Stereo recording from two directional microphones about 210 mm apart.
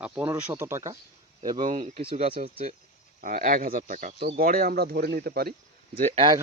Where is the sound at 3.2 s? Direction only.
40° right (ahead or behind).